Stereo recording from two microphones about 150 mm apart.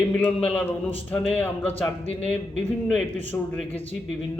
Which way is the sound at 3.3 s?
15° left (ahead or behind).